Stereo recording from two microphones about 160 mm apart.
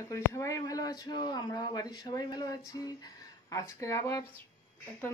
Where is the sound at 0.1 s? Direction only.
20° left (ahead or behind).